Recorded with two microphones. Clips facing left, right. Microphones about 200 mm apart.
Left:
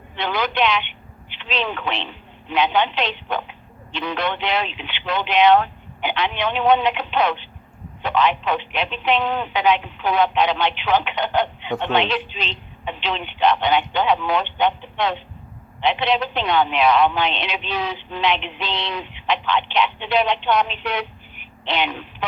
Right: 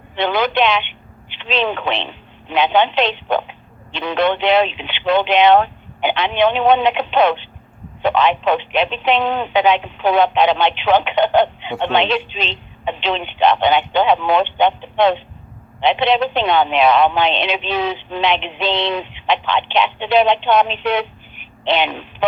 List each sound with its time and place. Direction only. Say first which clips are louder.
0.2 s speech: right 5 dB; 25° right (ahead or behind)